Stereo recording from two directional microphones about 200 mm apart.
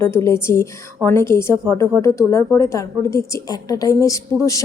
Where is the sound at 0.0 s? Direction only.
10° left (ahead or behind).